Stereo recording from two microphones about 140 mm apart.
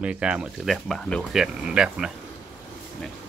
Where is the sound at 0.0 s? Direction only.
5° right (ahead or behind).